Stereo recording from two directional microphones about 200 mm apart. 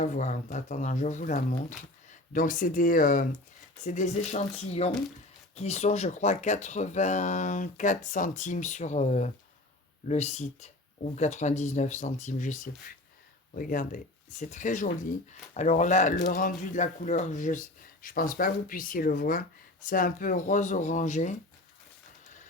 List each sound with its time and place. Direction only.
0.0 s speech: 40° left (ahead or behind)